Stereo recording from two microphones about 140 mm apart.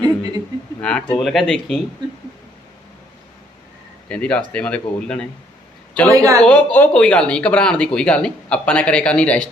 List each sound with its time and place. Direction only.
0.8 s speech: 10° left (ahead or behind)
4.1 s a woman's voice: 10° left (ahead or behind)
6.1 s speech: 25° right (ahead or behind)
6.4 s speech: 10° left (ahead or behind)